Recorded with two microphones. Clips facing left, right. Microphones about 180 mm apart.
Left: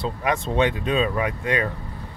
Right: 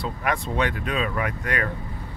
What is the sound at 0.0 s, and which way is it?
Speech, 25° left (ahead or behind).